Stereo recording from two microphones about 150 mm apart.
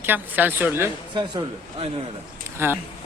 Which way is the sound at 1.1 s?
30° right (ahead or behind).